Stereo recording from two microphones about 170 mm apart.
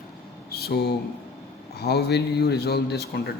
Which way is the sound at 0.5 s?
70° left (ahead or behind).